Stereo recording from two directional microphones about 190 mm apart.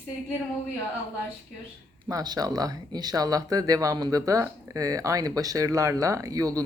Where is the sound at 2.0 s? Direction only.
20° right (ahead or behind).